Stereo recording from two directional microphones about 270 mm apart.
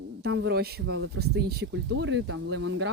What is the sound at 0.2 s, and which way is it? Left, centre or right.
Speech, right.